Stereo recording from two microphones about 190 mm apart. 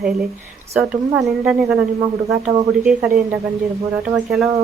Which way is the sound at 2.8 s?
5° right (ahead or behind).